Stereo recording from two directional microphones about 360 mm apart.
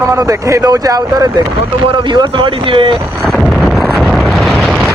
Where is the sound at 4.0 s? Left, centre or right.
Centre.